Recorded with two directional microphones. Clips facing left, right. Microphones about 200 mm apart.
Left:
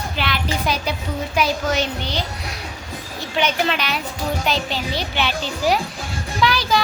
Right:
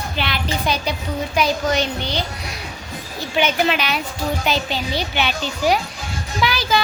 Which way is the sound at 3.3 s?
5° right (ahead or behind).